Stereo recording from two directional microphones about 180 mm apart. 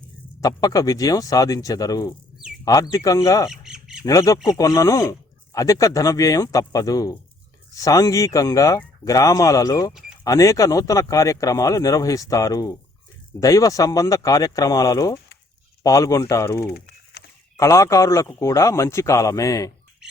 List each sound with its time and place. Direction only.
0.4 s speech: 20° left (ahead or behind)
3.5 s squawk: 5° right (ahead or behind)
4.0 s speech: 20° left (ahead or behind)
16.7 s a sound: 65° left (ahead or behind)
17.6 s speech: 15° left (ahead or behind)